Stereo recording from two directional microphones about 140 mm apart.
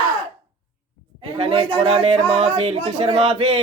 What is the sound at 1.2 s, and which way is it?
Speech, 45° right (ahead or behind).